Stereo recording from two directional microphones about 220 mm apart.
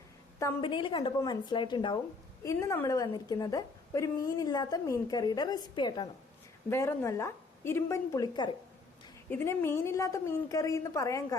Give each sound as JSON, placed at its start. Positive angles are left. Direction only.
{"t": 0.3, "sound": "a woman's voice", "side_deg": 15}